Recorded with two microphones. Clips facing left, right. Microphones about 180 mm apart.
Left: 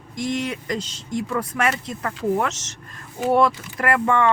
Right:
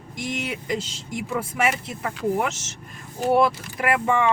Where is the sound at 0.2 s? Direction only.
5° right (ahead or behind).